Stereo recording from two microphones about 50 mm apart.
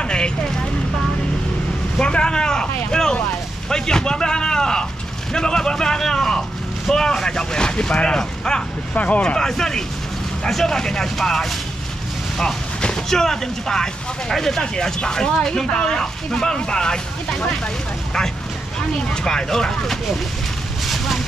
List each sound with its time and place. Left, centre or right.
0.0 s vehicle: centre
2.0 s speech: centre
2.9 s boat: centre
3.6 s speech: centre
8.9 s speech: left
9.2 s speech: centre
18.8 s speech: centre
20.8 s vehicle: centre